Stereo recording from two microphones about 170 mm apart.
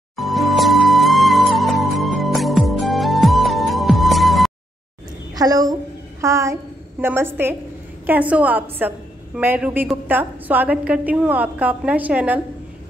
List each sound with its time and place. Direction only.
0.1 s music: centre (ahead or behind)
5.3 s a woman's voice: 20° right (ahead or behind)